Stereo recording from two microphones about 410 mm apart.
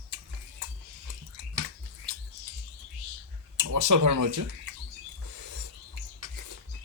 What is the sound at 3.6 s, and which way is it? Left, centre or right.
Speech, right.